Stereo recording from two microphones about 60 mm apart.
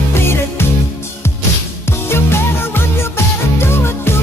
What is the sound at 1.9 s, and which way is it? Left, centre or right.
Music, left.